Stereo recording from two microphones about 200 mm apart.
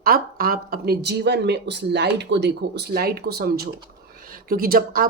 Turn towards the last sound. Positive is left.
turn(degrees=-45)  # may be behind; listen again after turning